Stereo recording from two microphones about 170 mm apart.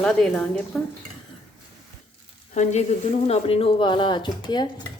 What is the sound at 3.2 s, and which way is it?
Speech, 35° left (ahead or behind).